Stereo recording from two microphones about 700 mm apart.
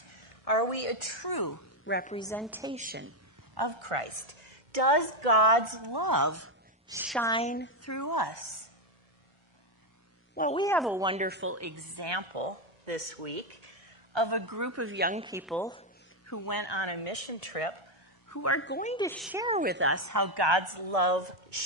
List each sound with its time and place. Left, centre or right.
0.0 s speech: left
1.9 s a woman's voice: centre
3.5 s a woman's voice: right
4.7 s a woman's voice: right
6.8 s speech: centre; by 8.6 s left
10.3 s a woman's voice: centre; by 12.5 s right
12.8 s speech: right
14.1 s a woman's voice: right; by 15.9 s centre
16.2 s speech: left
18.3 s a woman's voice: left; by 21.6 s right